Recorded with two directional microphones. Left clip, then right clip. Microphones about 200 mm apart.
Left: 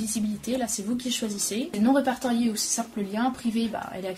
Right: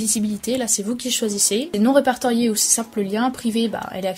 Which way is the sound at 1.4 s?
45° right (ahead or behind).